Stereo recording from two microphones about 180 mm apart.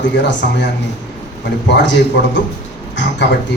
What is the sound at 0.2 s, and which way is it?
A man's voice, 80° left.